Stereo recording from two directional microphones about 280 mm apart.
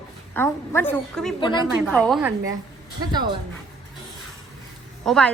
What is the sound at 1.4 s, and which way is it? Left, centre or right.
Speech, centre.